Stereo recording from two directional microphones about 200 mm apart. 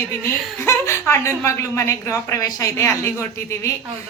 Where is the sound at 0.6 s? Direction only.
15° left (ahead or behind).